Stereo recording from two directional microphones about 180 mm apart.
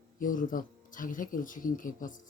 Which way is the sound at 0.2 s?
50° left (ahead or behind).